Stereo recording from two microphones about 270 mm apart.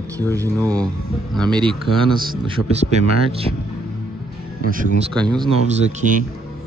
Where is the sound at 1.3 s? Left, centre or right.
Centre.